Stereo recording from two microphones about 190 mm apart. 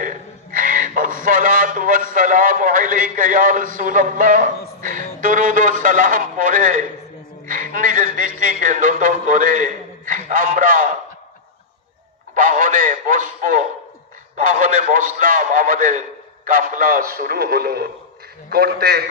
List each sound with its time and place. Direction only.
0.0 s a sound: 45° right (ahead or behind)
2.1 s a man's voice: 45° right (ahead or behind)
12.3 s a man's voice: 45° right (ahead or behind)